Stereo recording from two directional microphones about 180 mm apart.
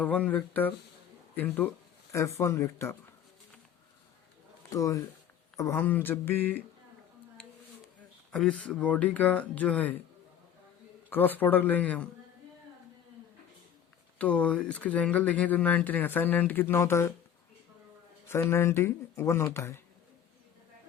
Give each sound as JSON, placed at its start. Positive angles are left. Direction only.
{"t": 0.0, "sound": "speech", "side_deg": 10}
{"t": 4.7, "sound": "speech", "side_deg": 20}
{"t": 8.3, "sound": "speech", "side_deg": 5}
{"t": 11.1, "sound": "speech", "side_deg": 10}
{"t": 14.2, "sound": "speech", "side_deg": 5}
{"t": 18.3, "sound": "speech", "side_deg": 15}